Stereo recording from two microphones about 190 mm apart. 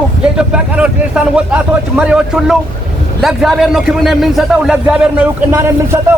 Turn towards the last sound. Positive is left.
turn(degrees=-15)  # may be behind; listen again after turning